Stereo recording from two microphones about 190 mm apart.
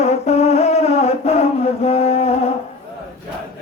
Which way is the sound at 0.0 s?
35° left (ahead or behind).